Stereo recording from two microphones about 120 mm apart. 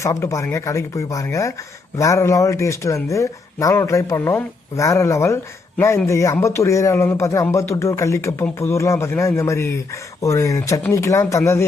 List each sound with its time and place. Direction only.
0.0 s speech: 25° left (ahead or behind)